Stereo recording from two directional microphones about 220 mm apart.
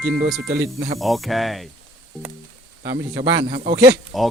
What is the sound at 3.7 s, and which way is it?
Speech, 45° right (ahead or behind).